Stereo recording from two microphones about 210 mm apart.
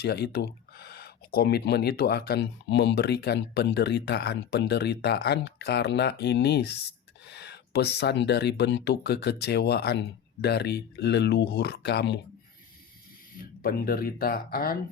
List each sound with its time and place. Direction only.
0.0 s speech: 50° left (ahead or behind)
13.4 s speech: 45° left (ahead or behind)